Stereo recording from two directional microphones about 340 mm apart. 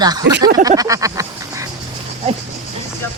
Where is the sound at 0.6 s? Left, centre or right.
Centre.